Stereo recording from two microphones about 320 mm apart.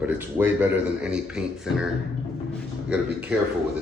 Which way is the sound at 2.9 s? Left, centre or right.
Centre.